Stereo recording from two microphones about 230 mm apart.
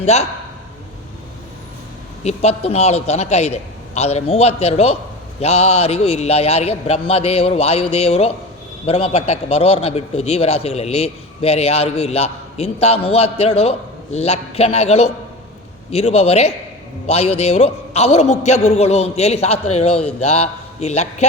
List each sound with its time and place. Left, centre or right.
0.0 s a man's voice: left
2.2 s a man's voice: left